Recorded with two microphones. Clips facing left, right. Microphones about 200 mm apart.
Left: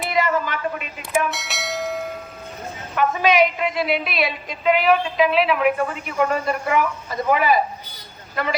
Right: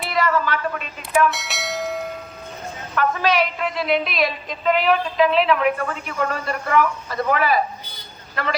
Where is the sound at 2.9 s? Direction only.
15° left (ahead or behind).